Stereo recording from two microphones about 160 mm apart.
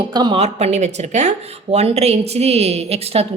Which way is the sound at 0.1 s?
30° right (ahead or behind).